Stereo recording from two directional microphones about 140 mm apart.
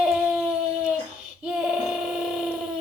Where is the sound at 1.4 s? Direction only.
5° right (ahead or behind).